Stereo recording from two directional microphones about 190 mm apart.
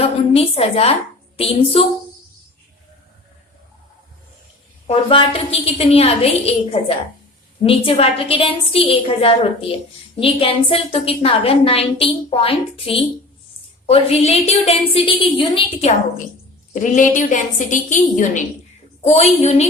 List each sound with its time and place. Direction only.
0.0 s a woman's voice: 30° left (ahead or behind)
4.9 s a woman's voice: 30° left (ahead or behind)